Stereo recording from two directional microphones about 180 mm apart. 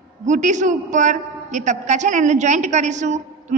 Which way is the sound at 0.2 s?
45° right (ahead or behind).